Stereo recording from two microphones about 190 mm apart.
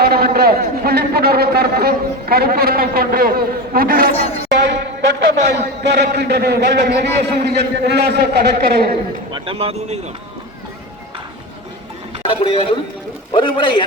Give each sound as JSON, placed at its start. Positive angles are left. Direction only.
{"t": 0.0, "sound": "a man's voice", "side_deg": -55}
{"t": 4.1, "sound": "speech", "side_deg": 30}
{"t": 4.5, "sound": "a sound", "side_deg": -65}
{"t": 5.8, "sound": "a man's voice", "side_deg": -60}
{"t": 9.3, "sound": "speech", "side_deg": -30}
{"t": 12.2, "sound": "a man's voice", "side_deg": 30}